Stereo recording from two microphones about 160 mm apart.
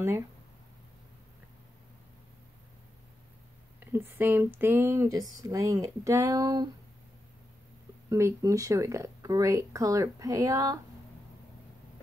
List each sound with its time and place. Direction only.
3.8 s speech: 15° right (ahead or behind)
8.1 s speech: 20° right (ahead or behind)